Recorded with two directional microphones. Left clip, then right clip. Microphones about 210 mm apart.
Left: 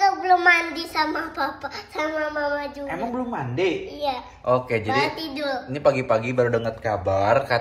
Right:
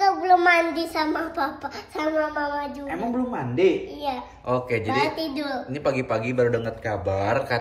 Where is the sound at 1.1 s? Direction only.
15° right (ahead or behind).